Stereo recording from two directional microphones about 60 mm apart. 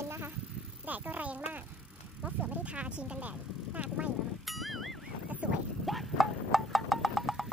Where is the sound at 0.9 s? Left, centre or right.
Right.